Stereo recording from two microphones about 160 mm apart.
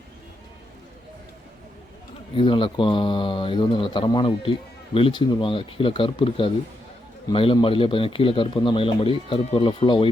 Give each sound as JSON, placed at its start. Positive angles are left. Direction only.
{"t": 2.3, "sound": "a man's voice", "side_deg": 35}